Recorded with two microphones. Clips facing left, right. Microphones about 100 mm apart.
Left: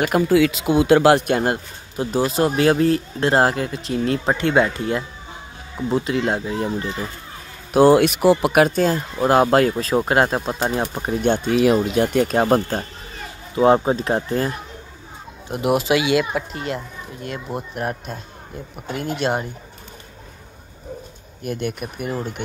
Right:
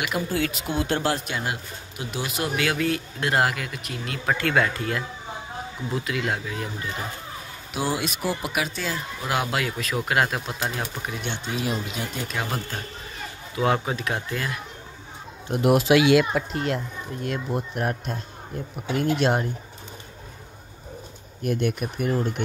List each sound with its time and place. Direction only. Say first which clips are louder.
0.3 s speech: left 10 dB; 90° left
1.2 s speech: left 10 dB; 50° left (ahead or behind)
2.0 s speech: left 10 dB; 35° left (ahead or behind)
7.7 s speech: left 14 dB; 60° left (ahead or behind)
12.4 s speech: left 10 dB; 40° left (ahead or behind)
13.6 s speech: left 8 dB; 30° left (ahead or behind)
15.4 s speech: even; centre (ahead or behind)
21.4 s speech: right 1 dB; centre (ahead or behind)